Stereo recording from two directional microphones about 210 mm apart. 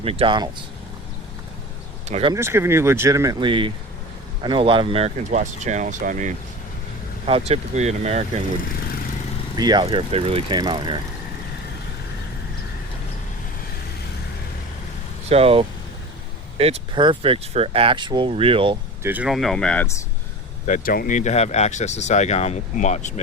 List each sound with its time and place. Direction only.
0.0 s speech: 25° right (ahead or behind)
2.0 s speech: 30° right (ahead or behind)
2.3 s speech: 10° right (ahead or behind); by 8.2 s 30° right (ahead or behind)
9.6 s speech: 20° right (ahead or behind)
15.3 s speech: 30° right (ahead or behind)
19.0 s speech: 5° right (ahead or behind)
20.7 s speech: 40° left (ahead or behind)